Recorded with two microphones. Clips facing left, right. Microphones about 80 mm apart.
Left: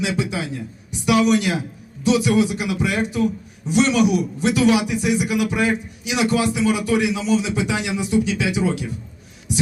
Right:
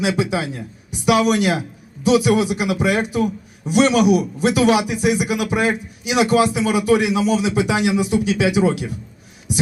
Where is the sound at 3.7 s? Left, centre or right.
Right.